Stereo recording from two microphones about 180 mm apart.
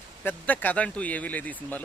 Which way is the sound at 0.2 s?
10° left (ahead or behind).